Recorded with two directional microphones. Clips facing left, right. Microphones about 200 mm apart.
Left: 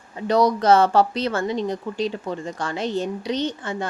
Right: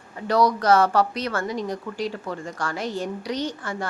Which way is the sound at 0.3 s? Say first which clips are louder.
Left 2 dB; 20° left (ahead or behind).